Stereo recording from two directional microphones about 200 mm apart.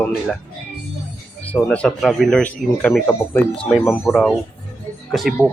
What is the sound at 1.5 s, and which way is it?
Speech, 5° left (ahead or behind).